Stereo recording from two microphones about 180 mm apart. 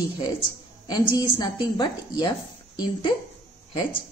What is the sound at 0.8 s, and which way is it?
Speech, 25° left (ahead or behind).